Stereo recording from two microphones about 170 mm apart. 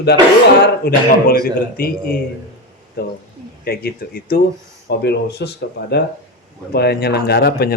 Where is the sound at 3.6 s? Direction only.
65° left (ahead or behind).